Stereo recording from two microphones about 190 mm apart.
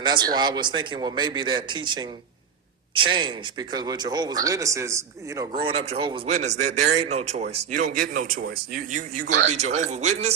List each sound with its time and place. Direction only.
0.0 s speech: 25° right (ahead or behind)
5.4 s a man's voice: 25° right (ahead or behind)